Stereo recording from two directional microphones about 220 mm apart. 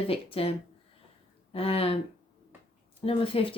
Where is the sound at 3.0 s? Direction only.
25° left (ahead or behind).